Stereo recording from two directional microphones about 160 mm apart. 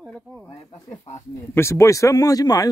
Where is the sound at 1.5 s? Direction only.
15° left (ahead or behind).